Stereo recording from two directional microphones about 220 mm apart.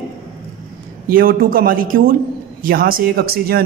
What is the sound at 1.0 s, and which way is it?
Speech, 40° right (ahead or behind).